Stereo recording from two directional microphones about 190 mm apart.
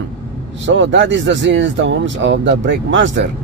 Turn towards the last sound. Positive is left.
turn(degrees=-70)  # may be behind; listen again after turning